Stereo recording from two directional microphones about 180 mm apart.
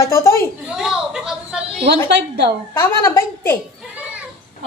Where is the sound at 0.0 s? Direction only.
15° left (ahead or behind).